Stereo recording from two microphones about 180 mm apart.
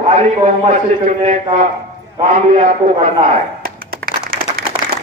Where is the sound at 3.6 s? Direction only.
55° right (ahead or behind).